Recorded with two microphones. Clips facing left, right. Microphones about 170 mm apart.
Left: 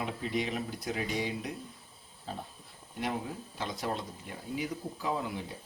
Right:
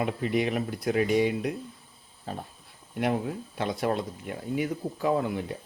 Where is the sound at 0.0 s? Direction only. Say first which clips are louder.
Right 7 dB; 60° right (ahead or behind).